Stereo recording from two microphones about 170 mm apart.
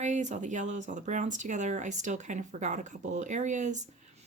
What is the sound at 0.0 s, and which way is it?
A woman's voice, 45° right (ahead or behind).